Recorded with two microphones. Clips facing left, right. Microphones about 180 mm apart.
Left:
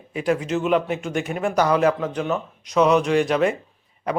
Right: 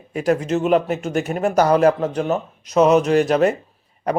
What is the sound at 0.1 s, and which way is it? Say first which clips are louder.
Speech: right 3 dB; 45° right (ahead or behind).